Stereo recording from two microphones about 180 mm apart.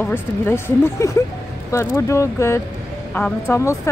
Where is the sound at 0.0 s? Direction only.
10° left (ahead or behind).